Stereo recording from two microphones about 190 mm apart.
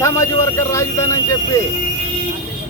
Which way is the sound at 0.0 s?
15° left (ahead or behind).